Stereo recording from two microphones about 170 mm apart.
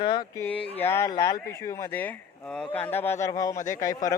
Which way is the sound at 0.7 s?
15° left (ahead or behind).